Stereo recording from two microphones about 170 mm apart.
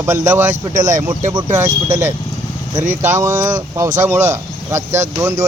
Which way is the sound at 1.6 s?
45° right (ahead or behind).